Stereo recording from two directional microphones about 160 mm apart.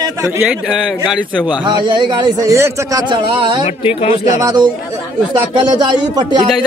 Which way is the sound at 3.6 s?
35° left (ahead or behind).